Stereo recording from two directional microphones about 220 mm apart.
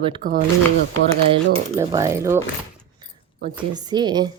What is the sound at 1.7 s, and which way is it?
Speech, 15° right (ahead or behind).